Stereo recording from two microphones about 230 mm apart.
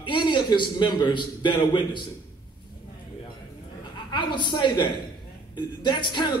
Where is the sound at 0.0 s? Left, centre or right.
Centre.